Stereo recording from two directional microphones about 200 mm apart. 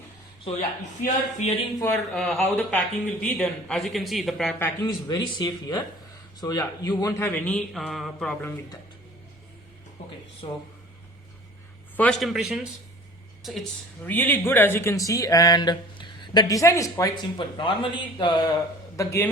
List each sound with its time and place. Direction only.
1.0 s speech: 35° left (ahead or behind)
1.8 s a man's voice: centre (ahead or behind)
4.9 s speech: 20° left (ahead or behind)
10.4 s speech: 25° left (ahead or behind)
11.9 s a man's voice: 5° left (ahead or behind)